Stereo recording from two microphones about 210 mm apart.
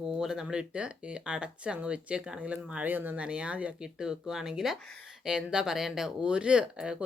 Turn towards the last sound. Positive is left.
turn(degrees=-5)  # may be behind; listen again after turning